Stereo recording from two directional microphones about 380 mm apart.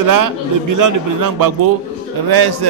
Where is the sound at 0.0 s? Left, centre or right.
Right.